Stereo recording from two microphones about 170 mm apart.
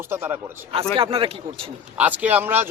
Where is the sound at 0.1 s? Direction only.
15° right (ahead or behind).